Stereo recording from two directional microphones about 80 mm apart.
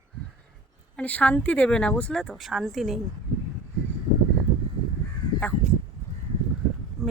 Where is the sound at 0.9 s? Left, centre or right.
Centre.